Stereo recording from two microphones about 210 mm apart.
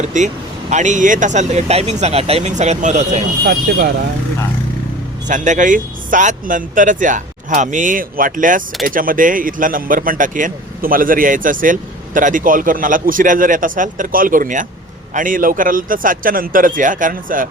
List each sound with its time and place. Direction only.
0.0 s a man's voice: 35° right (ahead or behind)
3.7 s speech: 50° right (ahead or behind)
5.3 s a man's voice: 35° right (ahead or behind)